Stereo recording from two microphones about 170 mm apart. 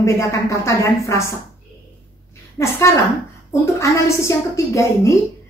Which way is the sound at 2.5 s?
15° left (ahead or behind).